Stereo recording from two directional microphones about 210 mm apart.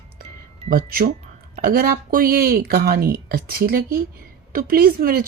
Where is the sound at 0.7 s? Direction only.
45° right (ahead or behind).